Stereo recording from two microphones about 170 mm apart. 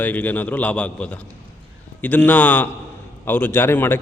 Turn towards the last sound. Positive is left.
turn(degrees=15)  # may be behind; listen again after turning